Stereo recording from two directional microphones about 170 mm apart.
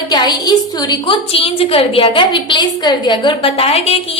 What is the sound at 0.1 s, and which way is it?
A woman's voice, 25° left (ahead or behind).